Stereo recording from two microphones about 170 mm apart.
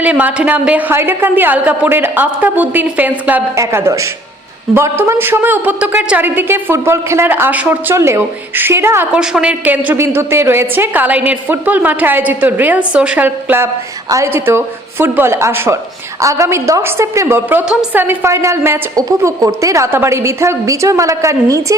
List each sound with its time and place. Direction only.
0.0 s a woman's voice: 10° right (ahead or behind)